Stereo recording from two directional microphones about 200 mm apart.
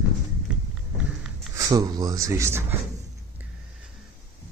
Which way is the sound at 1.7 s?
20° right (ahead or behind).